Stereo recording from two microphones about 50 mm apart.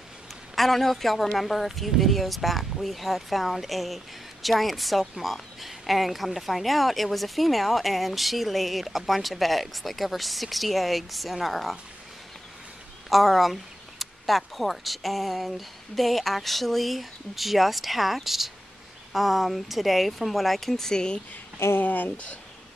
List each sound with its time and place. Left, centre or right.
0.6 s speech: centre
13.1 s speech: centre
21.7 s speech: left